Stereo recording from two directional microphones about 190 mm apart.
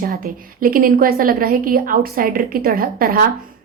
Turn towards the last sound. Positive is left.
turn(degrees=-50)  # may be behind; listen again after turning